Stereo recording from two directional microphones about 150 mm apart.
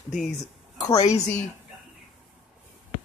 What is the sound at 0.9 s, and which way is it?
Speech, 45° left (ahead or behind).